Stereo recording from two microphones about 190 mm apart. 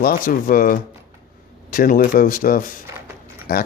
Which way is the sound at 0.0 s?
50° left (ahead or behind).